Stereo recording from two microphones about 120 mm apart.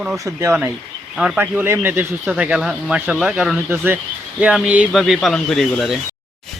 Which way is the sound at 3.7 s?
15° right (ahead or behind).